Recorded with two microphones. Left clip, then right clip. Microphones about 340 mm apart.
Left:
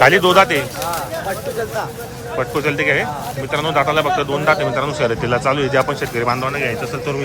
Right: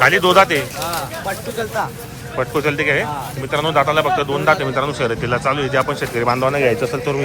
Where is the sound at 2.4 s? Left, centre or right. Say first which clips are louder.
Even; centre.